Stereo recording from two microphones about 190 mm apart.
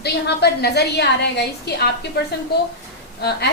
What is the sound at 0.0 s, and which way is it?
A woman's voice, 60° left (ahead or behind).